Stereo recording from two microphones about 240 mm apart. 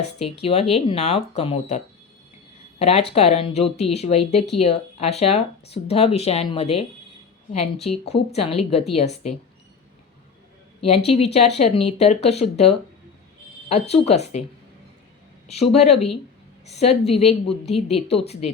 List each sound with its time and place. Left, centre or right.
0.4 s speech: left
10.8 s speech: left
15.4 s speech: left